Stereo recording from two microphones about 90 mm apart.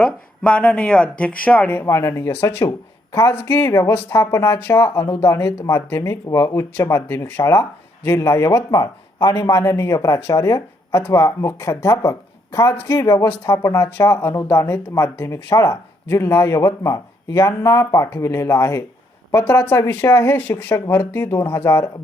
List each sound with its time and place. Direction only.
0.0 s speech: 15° left (ahead or behind)
1.7 s speech: 30° left (ahead or behind)
2.6 s speech: 40° left (ahead or behind)